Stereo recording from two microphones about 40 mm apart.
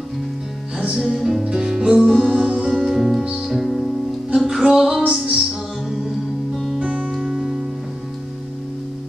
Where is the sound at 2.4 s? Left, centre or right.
Centre.